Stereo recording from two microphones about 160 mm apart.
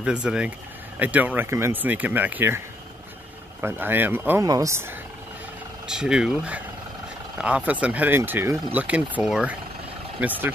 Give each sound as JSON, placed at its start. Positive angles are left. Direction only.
{"t": 0.0, "sound": "speech", "side_deg": -5}
{"t": 3.6, "sound": "speech", "side_deg": -10}
{"t": 5.9, "sound": "speech", "side_deg": -5}